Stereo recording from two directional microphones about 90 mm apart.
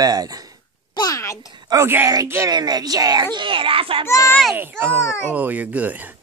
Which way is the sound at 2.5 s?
50° right (ahead or behind).